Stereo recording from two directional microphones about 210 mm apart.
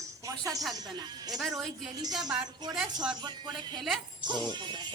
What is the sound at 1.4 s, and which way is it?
Speech, centre (ahead or behind).